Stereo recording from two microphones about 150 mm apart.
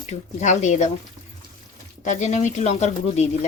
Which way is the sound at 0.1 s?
50° left (ahead or behind).